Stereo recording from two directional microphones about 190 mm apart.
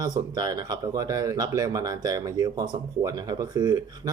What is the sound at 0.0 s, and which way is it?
Speech, 20° right (ahead or behind).